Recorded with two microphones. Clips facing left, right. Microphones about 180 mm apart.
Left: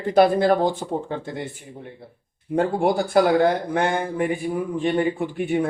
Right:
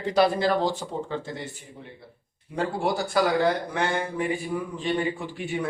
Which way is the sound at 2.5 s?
50° left (ahead or behind).